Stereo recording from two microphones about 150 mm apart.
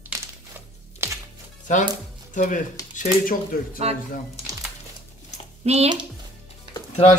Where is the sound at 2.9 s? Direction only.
70° left (ahead or behind).